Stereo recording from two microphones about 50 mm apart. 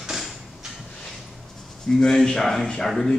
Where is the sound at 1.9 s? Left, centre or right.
Centre.